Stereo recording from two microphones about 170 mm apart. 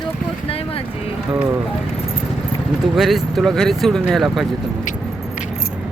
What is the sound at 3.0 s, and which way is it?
Speech, centre (ahead or behind).